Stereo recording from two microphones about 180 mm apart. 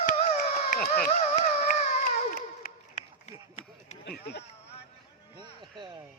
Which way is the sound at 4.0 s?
65° left (ahead or behind).